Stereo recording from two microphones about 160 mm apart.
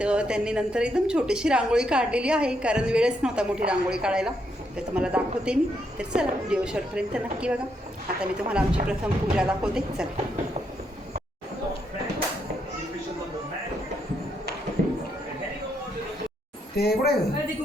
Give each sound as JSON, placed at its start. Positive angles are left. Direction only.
{"t": 0.0, "sound": "a woman's voice", "side_deg": -5}
{"t": 14.8, "sound": "a sound", "side_deg": -55}
{"t": 16.7, "sound": "speech", "side_deg": 80}